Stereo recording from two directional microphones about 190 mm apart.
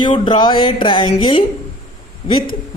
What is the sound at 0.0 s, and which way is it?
Speech, 25° left (ahead or behind).